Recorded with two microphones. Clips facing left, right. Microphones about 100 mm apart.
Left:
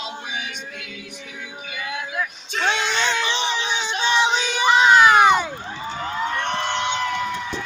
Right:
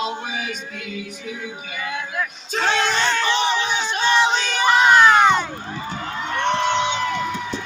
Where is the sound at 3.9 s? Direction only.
45° right (ahead or behind).